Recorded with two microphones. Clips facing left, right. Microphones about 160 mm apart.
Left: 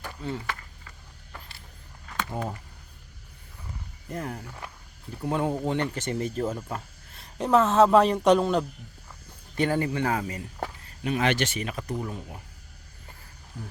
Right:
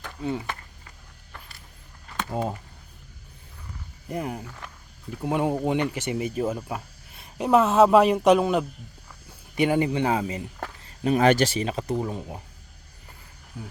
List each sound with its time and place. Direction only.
0.2 s speech: 15° right (ahead or behind)
2.3 s speech: 20° right (ahead or behind)
4.1 s speech: 15° right (ahead or behind)
11.0 s speech: 40° right (ahead or behind)